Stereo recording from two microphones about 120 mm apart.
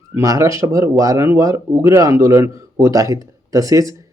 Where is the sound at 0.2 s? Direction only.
25° right (ahead or behind).